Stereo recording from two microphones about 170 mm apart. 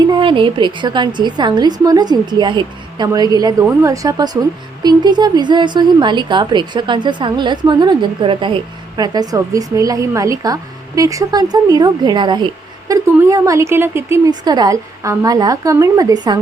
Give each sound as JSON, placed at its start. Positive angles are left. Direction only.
{"t": 0.1, "sound": "a woman's voice", "side_deg": -30}